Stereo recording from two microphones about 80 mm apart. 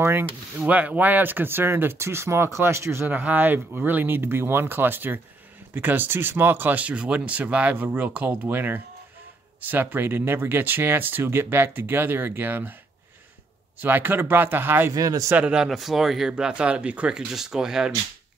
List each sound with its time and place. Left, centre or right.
0.0 s speech: right
3.1 s speech: right
13.7 s speech: right
15.0 s speech: right
15.3 s speech: centre